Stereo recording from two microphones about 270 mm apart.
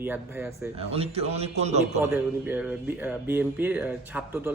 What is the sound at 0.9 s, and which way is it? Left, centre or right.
Speech, right.